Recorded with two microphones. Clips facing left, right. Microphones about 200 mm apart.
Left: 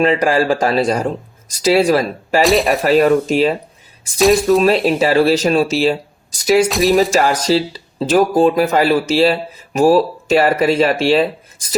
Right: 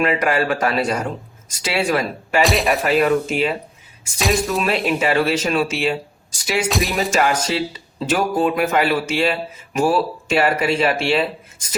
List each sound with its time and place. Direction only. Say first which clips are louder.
0.0 s speech: left 5 dB; 30° left (ahead or behind)
2.4 s speech: left 4 dB; centre (ahead or behind)
2.8 s speech: left 5 dB; 40° left (ahead or behind)
4.2 s speech: left 9 dB; centre (ahead or behind)
4.6 s speech: left 6 dB; 35° left (ahead or behind)
6.7 s speech: left 8 dB; centre (ahead or behind)
7.2 s speech: left 4 dB; 35° left (ahead or behind)